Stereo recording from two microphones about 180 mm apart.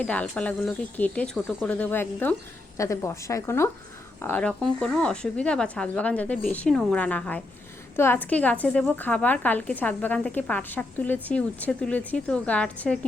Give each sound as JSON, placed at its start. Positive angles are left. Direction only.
{"t": 0.0, "sound": "speech", "side_deg": 5}